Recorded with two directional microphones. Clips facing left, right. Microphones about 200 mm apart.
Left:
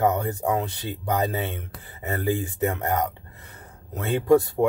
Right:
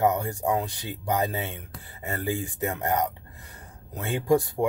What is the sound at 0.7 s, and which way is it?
Speech, 15° right (ahead or behind).